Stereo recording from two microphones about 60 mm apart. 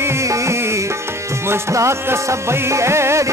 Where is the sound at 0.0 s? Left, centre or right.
Right.